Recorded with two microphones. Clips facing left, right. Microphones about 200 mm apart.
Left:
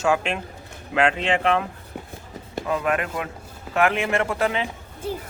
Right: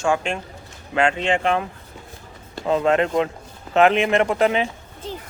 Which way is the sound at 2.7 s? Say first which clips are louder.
Right 6 dB; 25° right (ahead or behind).